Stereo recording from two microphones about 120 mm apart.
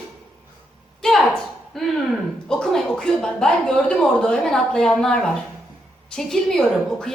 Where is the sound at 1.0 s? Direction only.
5° left (ahead or behind).